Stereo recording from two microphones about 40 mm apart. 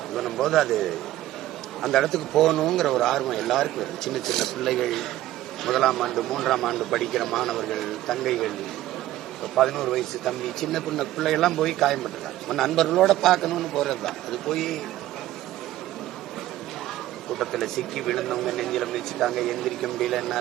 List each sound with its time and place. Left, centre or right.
0.2 s speech: centre
9.6 s speech: centre
17.3 s speech: centre